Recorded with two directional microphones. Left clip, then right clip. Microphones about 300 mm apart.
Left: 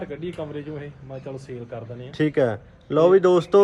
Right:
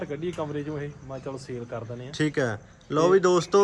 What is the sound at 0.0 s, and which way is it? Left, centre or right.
A man's voice, right.